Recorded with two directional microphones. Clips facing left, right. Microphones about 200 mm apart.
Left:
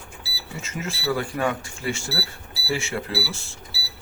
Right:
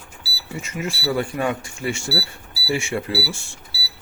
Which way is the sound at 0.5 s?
15° right (ahead or behind).